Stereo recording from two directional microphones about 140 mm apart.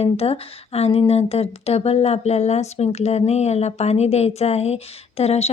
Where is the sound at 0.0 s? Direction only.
45° left (ahead or behind).